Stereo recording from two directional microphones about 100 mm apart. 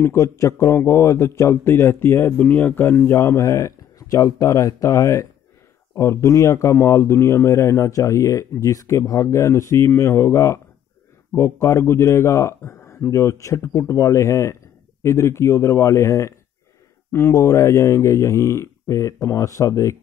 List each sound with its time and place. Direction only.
0.0 s a man's voice: 25° left (ahead or behind)